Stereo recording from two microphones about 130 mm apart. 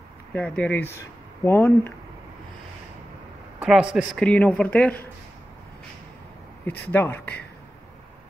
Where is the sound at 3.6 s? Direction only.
5° right (ahead or behind).